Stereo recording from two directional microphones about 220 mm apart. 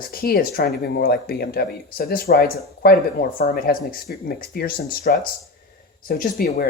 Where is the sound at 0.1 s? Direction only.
45° left (ahead or behind).